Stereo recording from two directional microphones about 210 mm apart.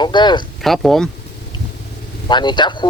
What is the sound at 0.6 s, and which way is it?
Speech, centre (ahead or behind).